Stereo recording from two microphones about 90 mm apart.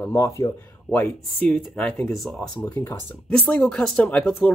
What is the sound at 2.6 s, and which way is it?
Speech, 20° left (ahead or behind).